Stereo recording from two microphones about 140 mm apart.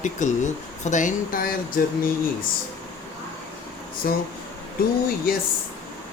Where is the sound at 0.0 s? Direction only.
60° left (ahead or behind); by 1.8 s 90° left.